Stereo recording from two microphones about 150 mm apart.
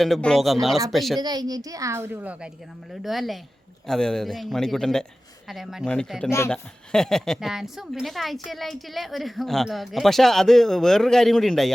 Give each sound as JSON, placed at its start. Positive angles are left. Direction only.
{"t": 0.0, "sound": "a woman's voice", "side_deg": 5}
{"t": 1.2, "sound": "a child's voice", "side_deg": -25}